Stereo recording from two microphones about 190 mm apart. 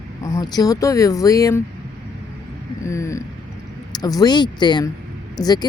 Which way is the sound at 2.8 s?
15° left (ahead or behind).